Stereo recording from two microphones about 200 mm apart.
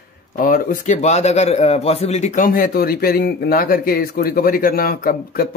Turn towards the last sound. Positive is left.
turn(degrees=45)  # may be behind; listen again after turning